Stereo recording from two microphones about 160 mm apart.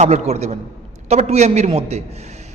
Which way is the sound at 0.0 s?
45° right (ahead or behind).